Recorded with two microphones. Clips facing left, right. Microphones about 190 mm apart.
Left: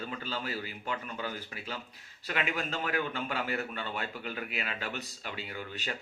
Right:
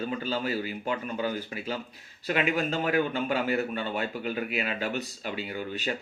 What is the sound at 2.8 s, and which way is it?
Speech, 15° right (ahead or behind).